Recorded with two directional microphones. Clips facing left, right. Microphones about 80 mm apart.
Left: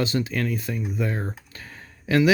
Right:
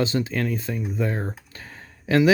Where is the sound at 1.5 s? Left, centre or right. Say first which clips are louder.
Even; right.